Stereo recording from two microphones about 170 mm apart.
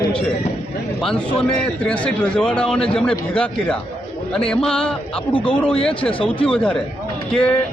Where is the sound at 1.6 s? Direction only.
5° left (ahead or behind).